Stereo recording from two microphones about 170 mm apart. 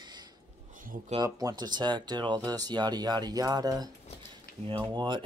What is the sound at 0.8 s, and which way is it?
Speech, 50° right (ahead or behind).